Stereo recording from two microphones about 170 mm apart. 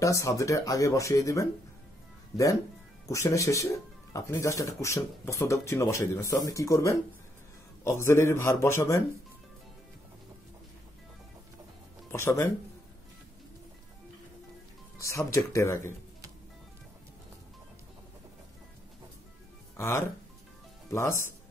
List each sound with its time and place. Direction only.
0.0 s speech: 20° left (ahead or behind)
12.1 s speech: 15° left (ahead or behind)
15.0 s speech: 20° left (ahead or behind)
19.8 s speech: 15° left (ahead or behind)